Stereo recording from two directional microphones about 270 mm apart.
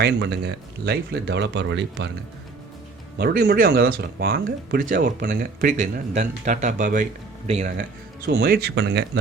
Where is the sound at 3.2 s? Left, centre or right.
Right.